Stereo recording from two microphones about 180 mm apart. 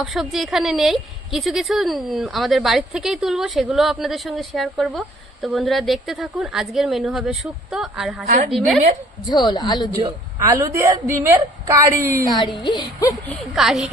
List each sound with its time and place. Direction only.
0.0 s a woman's voice: centre (ahead or behind)
9.2 s a woman's voice: 25° left (ahead or behind)
10.4 s a woman's voice: 15° right (ahead or behind)
12.3 s a woman's voice: 25° left (ahead or behind)
13.3 s a woman's voice: centre (ahead or behind)